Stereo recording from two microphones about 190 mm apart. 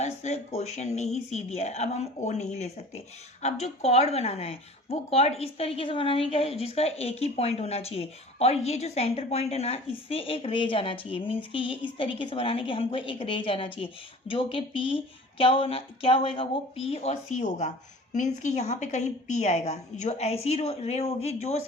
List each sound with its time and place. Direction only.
0.0 s a woman's voice: 35° left (ahead or behind)